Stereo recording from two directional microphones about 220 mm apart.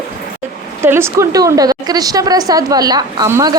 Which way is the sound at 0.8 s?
10° right (ahead or behind).